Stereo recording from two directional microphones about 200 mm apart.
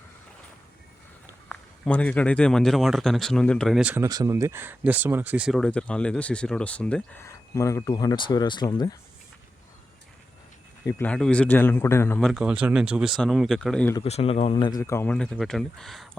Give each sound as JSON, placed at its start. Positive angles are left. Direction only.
{"t": 1.5, "sound": "a man's voice", "side_deg": 5}
{"t": 10.8, "sound": "speech", "side_deg": 10}
{"t": 12.3, "sound": "a man's voice", "side_deg": -5}
{"t": 13.9, "sound": "speech", "side_deg": 30}
{"t": 14.8, "sound": "a man's voice", "side_deg": 15}